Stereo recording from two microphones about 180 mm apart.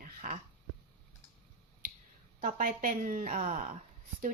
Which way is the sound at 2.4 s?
45° right (ahead or behind).